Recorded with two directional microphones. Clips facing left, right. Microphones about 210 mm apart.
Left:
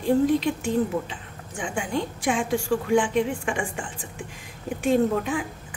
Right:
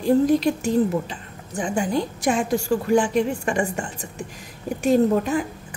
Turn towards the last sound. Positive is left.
turn(degrees=-40)  # may be behind; listen again after turning